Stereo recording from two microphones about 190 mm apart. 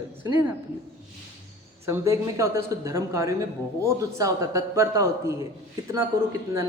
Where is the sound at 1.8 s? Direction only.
15° right (ahead or behind).